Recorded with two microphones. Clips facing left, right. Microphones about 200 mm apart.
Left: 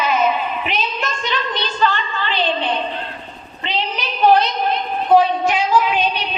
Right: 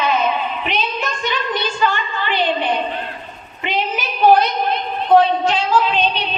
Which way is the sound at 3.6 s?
50° right (ahead or behind).